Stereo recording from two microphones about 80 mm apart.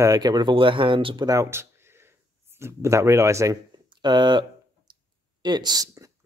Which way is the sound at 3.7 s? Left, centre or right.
Right.